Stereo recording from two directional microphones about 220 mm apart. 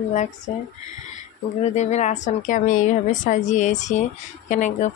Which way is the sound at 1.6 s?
30° left (ahead or behind).